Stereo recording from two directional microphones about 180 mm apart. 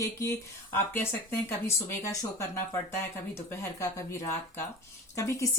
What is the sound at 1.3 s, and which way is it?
Speech, 15° left (ahead or behind).